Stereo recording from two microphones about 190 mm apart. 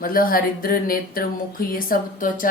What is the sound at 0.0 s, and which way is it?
Speech, 50° left (ahead or behind).